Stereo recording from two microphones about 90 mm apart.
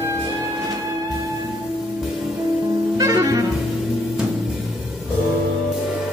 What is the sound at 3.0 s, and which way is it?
Music, 40° right (ahead or behind).